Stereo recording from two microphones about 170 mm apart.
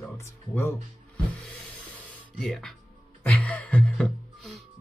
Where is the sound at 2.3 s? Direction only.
Centre (ahead or behind).